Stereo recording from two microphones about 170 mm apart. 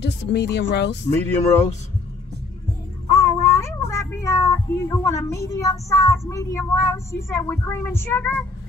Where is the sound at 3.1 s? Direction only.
20° left (ahead or behind).